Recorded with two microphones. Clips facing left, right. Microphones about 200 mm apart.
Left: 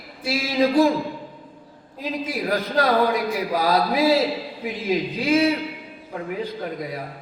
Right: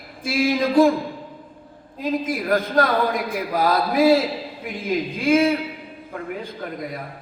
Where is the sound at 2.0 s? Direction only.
50° right (ahead or behind).